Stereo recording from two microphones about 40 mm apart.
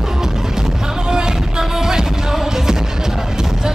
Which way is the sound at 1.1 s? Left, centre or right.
Centre.